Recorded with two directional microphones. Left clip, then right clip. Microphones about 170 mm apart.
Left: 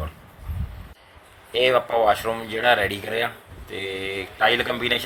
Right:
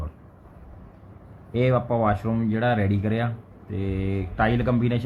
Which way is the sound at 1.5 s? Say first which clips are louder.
Left 4 dB; 20° left (ahead or behind).